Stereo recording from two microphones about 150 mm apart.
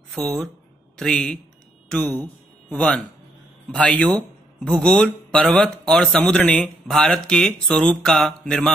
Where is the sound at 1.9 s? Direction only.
10° left (ahead or behind).